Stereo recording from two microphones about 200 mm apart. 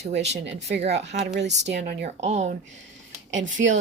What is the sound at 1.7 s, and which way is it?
Speech, 60° right (ahead or behind).